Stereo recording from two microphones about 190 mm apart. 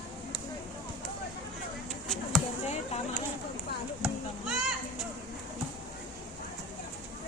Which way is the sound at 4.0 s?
5° right (ahead or behind).